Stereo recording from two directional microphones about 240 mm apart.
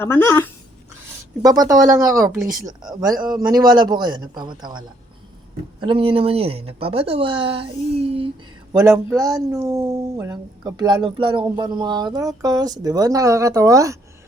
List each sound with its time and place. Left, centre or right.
0.0 s speech: centre
1.5 s speech: centre
8.8 s speech: centre